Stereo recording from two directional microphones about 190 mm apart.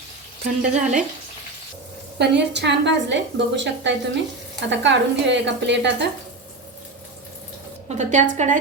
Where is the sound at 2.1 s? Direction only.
65° right (ahead or behind).